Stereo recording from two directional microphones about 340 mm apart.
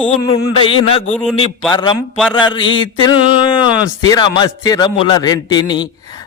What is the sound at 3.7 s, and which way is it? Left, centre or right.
Speech, right.